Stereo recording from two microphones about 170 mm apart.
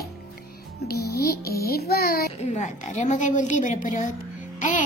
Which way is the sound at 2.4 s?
45° left (ahead or behind).